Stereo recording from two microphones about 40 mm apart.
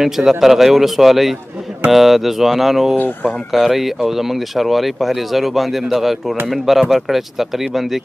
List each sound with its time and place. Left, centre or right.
0.0 s a man's voice: centre